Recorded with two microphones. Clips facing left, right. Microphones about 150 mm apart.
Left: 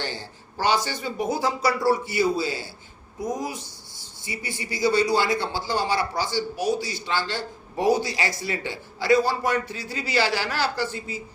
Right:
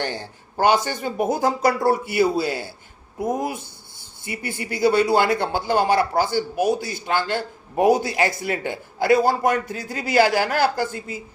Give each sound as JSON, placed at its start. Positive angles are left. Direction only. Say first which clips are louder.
{"t": 0.0, "sound": "speech", "louder": "right 5 dB", "side_deg": -55}